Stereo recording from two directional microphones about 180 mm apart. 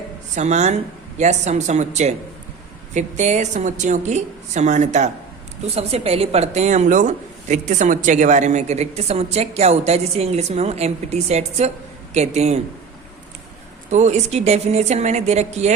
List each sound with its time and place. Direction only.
0.3 s a woman's voice: 40° right (ahead or behind)
13.9 s a woman's voice: 40° right (ahead or behind)